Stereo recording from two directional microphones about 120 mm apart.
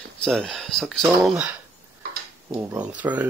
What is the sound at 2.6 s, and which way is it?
Speech, 15° right (ahead or behind).